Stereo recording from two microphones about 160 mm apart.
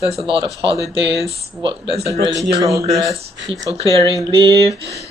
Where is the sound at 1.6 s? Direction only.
35° right (ahead or behind).